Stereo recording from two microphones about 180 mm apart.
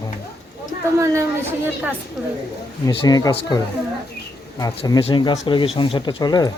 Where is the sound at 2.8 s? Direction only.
20° left (ahead or behind).